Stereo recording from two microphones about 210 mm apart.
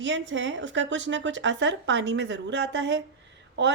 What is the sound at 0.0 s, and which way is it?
A woman's voice, 60° right (ahead or behind).